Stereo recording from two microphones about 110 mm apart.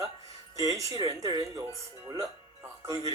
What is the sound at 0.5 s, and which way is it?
Speech, 35° right (ahead or behind).